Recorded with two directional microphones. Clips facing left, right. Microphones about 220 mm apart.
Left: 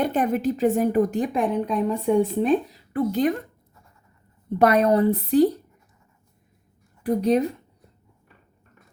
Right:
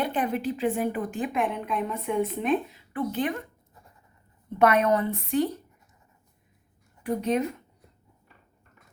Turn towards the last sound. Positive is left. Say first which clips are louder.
# left 5 dB
turn(degrees=35)  # may be behind; listen again after turning